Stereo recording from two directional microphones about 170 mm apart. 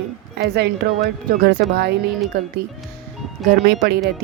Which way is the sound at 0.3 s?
75° right (ahead or behind).